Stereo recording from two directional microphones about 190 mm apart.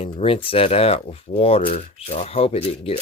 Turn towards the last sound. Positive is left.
turn(degrees=30)  # may be behind; listen again after turning